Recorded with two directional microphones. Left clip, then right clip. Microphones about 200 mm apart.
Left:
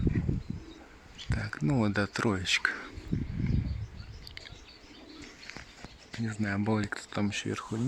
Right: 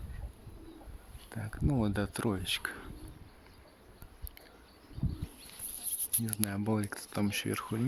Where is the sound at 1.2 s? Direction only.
Centre (ahead or behind).